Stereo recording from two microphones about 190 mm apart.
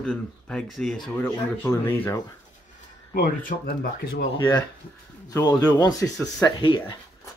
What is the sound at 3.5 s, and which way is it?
Speech, 45° left (ahead or behind).